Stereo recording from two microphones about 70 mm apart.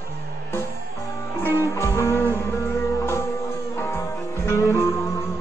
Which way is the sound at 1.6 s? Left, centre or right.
Left.